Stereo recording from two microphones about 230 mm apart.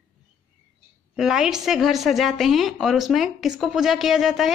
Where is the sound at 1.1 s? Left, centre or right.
Centre.